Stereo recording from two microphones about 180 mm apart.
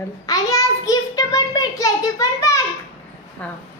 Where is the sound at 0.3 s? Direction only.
20° left (ahead or behind).